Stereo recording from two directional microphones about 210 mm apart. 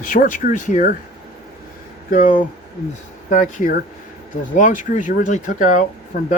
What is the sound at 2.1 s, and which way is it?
Speech, 40° left (ahead or behind).